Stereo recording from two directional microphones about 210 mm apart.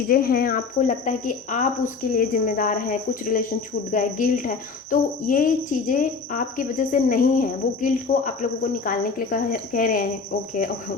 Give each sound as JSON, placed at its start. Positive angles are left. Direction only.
{"t": 0.1, "sound": "speech", "side_deg": 45}